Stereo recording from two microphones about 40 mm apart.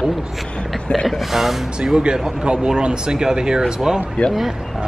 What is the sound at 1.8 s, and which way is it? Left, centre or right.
Speech, centre.